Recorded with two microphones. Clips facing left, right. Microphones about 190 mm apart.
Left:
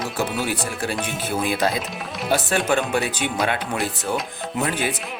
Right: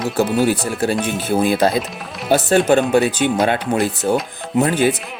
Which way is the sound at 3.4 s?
35° right (ahead or behind).